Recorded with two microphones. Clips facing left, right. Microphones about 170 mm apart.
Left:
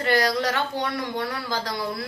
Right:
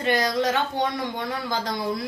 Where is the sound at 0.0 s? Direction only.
20° right (ahead or behind).